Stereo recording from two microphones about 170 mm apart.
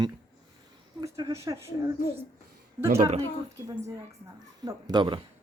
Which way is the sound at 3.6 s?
20° right (ahead or behind).